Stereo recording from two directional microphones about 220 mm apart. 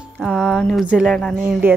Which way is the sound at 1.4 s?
10° right (ahead or behind).